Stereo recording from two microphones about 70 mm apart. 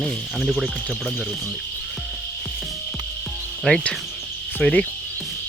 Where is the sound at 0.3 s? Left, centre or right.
Centre.